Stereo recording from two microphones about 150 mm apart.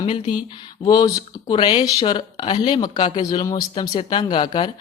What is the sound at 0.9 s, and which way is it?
Speech, 25° left (ahead or behind).